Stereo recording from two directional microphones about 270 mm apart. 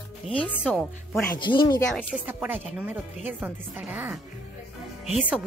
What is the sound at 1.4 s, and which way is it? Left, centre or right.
Speech, centre.